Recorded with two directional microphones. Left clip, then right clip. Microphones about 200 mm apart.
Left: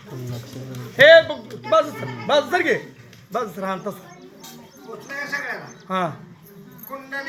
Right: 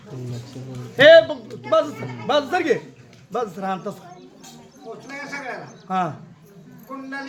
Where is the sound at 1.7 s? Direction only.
25° right (ahead or behind).